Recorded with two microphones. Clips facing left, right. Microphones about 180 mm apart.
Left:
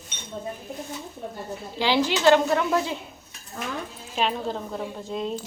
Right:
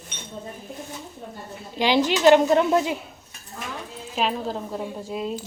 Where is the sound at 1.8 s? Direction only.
15° right (ahead or behind).